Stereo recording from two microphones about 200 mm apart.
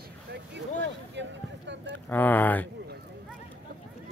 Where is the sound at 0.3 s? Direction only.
60° right (ahead or behind).